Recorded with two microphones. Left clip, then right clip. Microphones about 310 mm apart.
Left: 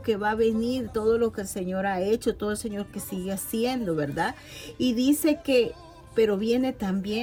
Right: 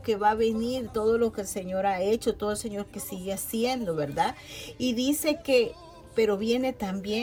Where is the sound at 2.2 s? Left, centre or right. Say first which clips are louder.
Even; centre.